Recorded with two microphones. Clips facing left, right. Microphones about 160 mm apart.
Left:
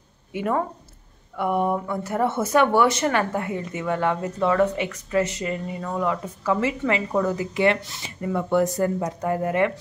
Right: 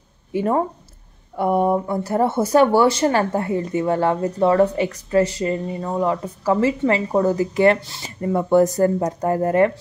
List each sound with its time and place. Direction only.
0.3 s speech: 35° right (ahead or behind)